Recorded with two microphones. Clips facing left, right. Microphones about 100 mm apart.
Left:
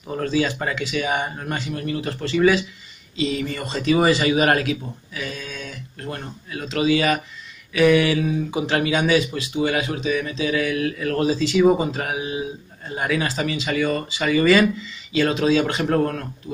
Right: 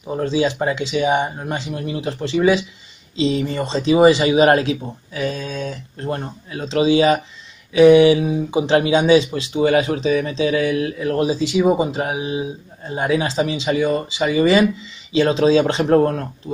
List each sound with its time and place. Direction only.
0.1 s speech: 20° right (ahead or behind)